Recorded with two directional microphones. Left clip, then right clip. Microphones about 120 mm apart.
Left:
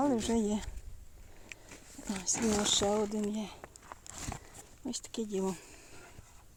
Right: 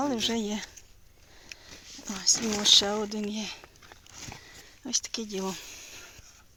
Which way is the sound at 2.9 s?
25° right (ahead or behind).